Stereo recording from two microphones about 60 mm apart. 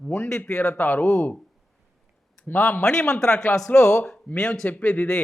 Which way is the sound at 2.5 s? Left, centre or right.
Left.